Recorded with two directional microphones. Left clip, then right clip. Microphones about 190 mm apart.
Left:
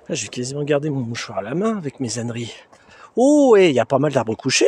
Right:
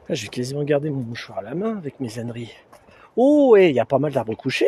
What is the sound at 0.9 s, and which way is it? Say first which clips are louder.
Speech: left 4 dB; 30° left (ahead or behind).